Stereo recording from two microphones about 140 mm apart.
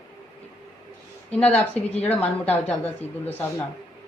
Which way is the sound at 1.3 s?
10° left (ahead or behind).